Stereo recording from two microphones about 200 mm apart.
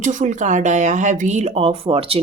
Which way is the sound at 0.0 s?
40° right (ahead or behind).